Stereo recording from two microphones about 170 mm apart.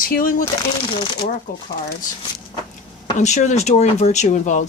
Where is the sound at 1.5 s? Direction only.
60° left (ahead or behind).